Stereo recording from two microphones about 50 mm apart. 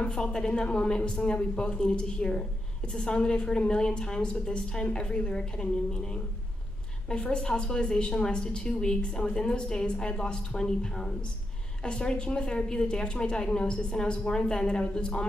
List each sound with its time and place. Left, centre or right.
0.1 s a woman's voice: centre
7.1 s a woman's voice: centre